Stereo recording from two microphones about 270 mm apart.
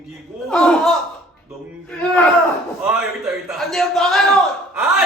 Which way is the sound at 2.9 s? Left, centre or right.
Centre.